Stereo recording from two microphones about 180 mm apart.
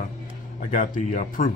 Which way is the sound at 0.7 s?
45° left (ahead or behind).